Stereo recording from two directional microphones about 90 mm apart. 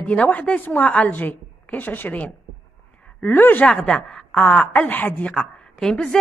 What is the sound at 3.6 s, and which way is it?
A woman's voice, 10° left (ahead or behind).